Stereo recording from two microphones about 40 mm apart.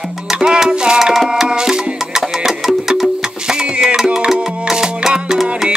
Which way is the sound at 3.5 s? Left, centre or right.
Centre.